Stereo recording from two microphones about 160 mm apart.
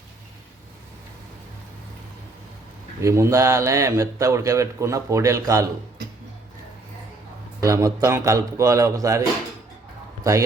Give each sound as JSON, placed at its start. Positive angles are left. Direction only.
{"t": 3.0, "sound": "speech", "side_deg": -20}
{"t": 7.6, "sound": "speech", "side_deg": -20}